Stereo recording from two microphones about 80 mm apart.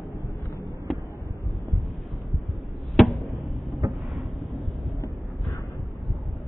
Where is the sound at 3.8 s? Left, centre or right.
Right.